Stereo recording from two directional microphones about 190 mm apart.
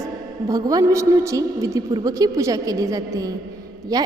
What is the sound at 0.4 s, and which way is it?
A woman's voice, 20° right (ahead or behind).